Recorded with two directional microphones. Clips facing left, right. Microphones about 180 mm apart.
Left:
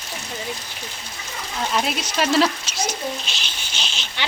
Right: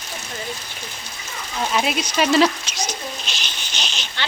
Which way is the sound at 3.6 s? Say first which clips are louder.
Right 1 dB; 10° left (ahead or behind).